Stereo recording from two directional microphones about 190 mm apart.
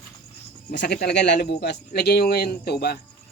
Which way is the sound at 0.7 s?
60° left (ahead or behind).